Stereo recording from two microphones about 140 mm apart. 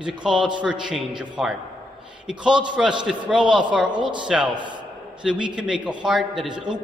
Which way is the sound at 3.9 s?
35° right (ahead or behind).